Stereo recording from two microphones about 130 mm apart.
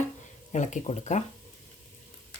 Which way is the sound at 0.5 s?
70° left (ahead or behind).